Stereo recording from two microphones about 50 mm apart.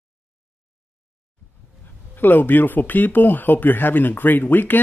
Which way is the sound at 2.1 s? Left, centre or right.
Left.